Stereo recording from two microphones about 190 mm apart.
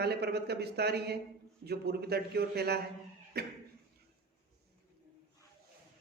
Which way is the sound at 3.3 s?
55° right (ahead or behind).